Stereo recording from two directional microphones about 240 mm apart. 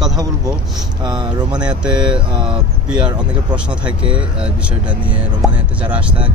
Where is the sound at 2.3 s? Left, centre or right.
Right.